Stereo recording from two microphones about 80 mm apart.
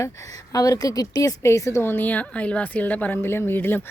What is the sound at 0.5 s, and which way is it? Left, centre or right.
Speech, left.